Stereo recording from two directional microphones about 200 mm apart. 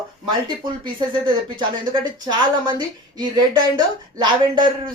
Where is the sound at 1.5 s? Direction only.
20° right (ahead or behind).